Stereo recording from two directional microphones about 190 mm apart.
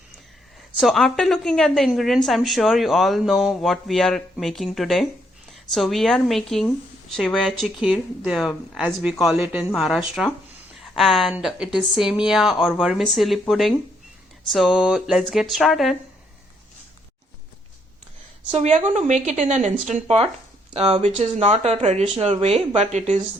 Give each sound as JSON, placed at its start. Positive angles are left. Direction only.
{"t": 0.8, "sound": "a woman's voice", "side_deg": 0}
{"t": 18.5, "sound": "speech", "side_deg": -35}